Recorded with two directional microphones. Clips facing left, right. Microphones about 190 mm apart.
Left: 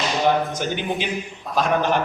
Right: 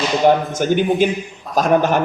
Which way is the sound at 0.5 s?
45° right (ahead or behind).